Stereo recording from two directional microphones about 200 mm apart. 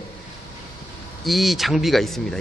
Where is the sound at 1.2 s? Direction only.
Centre (ahead or behind).